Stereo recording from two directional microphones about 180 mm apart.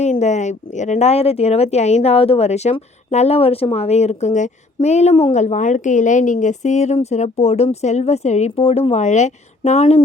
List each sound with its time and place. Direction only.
0.0 s speech: 40° left (ahead or behind)